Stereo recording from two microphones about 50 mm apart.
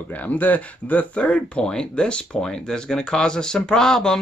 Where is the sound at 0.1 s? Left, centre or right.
Left.